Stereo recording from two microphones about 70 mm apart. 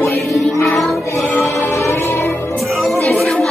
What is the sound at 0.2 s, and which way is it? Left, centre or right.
Music, centre.